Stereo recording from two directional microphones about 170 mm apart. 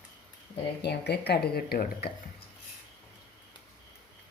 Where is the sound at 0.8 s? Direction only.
80° left; by 2.1 s 65° left (ahead or behind).